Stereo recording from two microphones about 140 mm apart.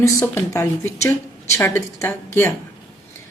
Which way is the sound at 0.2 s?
15° left (ahead or behind).